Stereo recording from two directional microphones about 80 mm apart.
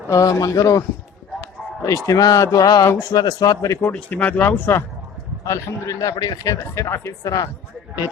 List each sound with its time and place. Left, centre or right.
0.1 s speech: left
3.9 s speech: centre
5.5 s speech: left
6.5 s speech: left